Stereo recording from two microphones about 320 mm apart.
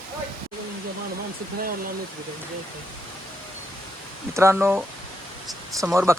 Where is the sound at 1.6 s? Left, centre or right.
Right.